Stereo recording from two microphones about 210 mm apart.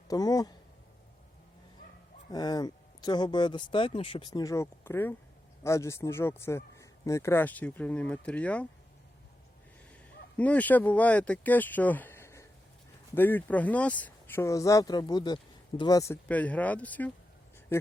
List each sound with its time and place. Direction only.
0.1 s a man's voice: 15° left (ahead or behind)
2.3 s a man's voice: 20° left (ahead or behind)
10.3 s a man's voice: 5° left (ahead or behind)